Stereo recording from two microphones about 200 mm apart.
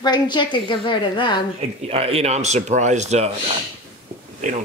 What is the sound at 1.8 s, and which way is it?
Speech, 30° right (ahead or behind).